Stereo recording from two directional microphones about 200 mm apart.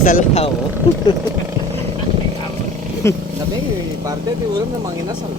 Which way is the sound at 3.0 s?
15° left (ahead or behind).